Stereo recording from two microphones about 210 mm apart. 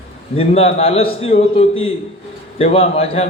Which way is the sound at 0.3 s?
30° left (ahead or behind).